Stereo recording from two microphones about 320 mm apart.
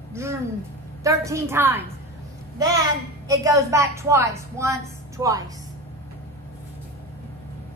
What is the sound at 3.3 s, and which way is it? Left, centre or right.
A woman's voice, centre.